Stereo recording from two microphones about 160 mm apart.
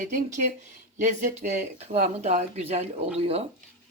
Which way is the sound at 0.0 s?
50° right (ahead or behind).